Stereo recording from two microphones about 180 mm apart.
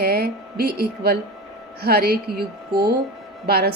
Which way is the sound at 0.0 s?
60° right (ahead or behind).